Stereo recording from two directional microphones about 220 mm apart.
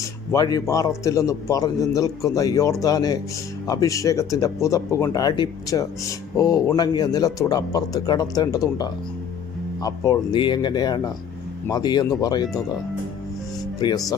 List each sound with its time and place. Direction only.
0.3 s speech: 15° left (ahead or behind)